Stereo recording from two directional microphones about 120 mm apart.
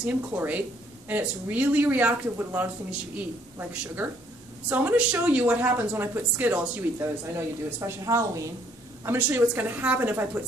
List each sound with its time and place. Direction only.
0.0 s speech: 15° right (ahead or behind)